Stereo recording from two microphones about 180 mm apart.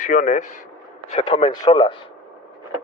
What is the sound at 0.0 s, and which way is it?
Speech, 45° left (ahead or behind).